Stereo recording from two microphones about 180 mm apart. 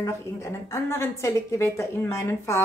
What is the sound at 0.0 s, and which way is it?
A woman's voice, 15° left (ahead or behind).